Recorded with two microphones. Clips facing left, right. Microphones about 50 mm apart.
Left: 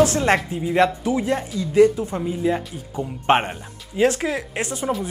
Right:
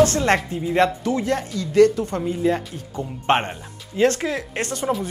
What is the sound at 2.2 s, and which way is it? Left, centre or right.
Speech, centre.